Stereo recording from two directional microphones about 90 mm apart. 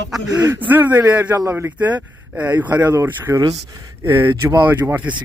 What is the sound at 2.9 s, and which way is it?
A man's voice, 30° right (ahead or behind).